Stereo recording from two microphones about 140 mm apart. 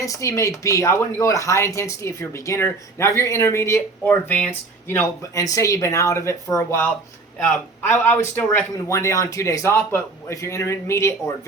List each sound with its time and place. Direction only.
0.0 s a man's voice: 20° left (ahead or behind)